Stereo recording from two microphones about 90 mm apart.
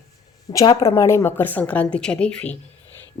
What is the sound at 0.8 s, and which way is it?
A woman's voice, 30° left (ahead or behind).